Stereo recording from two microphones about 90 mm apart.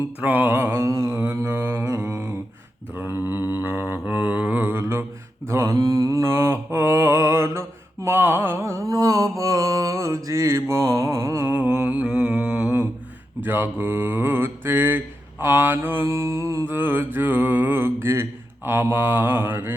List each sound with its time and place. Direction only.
0.2 s mantra: 20° right (ahead or behind); by 1.2 s 40° right (ahead or behind)
1.2 s mantra: 25° right (ahead or behind)
11.6 s mantra: 15° right (ahead or behind)